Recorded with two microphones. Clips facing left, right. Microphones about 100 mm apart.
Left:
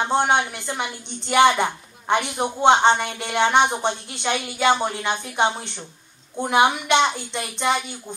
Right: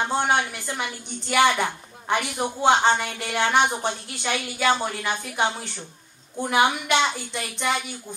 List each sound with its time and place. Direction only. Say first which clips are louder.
0.0 s a woman's voice: left 3 dB; 20° left (ahead or behind)